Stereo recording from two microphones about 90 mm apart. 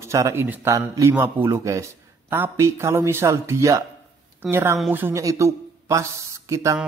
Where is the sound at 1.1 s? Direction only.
25° right (ahead or behind).